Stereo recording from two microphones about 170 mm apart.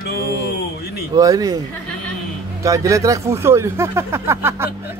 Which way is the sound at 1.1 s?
20° right (ahead or behind).